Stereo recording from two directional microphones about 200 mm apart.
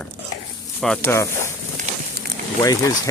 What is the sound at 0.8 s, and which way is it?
Speech, 5° left (ahead or behind).